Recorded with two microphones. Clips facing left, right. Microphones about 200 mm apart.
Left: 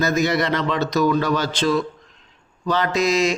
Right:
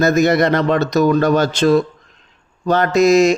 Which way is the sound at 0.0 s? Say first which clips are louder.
Right 6 dB; 50° right (ahead or behind).